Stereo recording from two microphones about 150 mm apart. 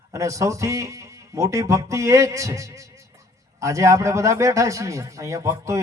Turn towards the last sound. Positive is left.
turn(degrees=-20)  # may be behind; listen again after turning